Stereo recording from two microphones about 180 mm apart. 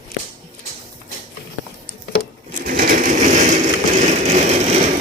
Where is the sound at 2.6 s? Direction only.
50° right (ahead or behind).